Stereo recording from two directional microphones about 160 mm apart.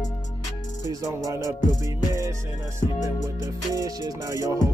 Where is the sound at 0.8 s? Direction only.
20° right (ahead or behind).